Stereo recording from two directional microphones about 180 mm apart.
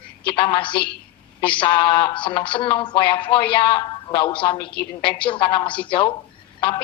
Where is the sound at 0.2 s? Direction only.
30° left (ahead or behind).